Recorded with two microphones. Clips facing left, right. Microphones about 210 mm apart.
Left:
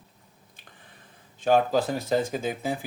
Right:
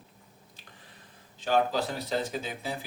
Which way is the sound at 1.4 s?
50° left (ahead or behind).